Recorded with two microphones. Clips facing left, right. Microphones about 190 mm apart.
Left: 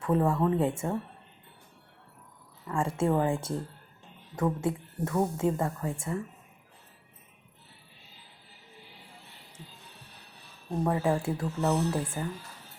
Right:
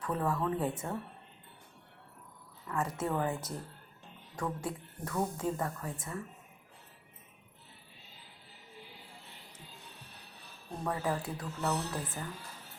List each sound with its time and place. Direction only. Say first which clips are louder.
0.0 s a woman's voice: left 7 dB; 25° left (ahead or behind)
2.6 s a woman's voice: left 6 dB; 30° left (ahead or behind)
10.8 s a woman's voice: left 6 dB; 25° left (ahead or behind)